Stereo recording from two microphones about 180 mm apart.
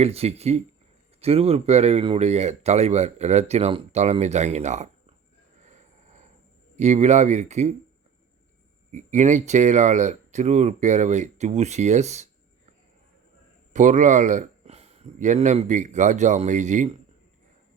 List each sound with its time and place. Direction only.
0.0 s speech: 35° right (ahead or behind)
5.6 s a sound: 40° right (ahead or behind)
6.7 s speech: 40° right (ahead or behind)
8.9 s speech: 45° right (ahead or behind)
13.7 s speech: 45° right (ahead or behind)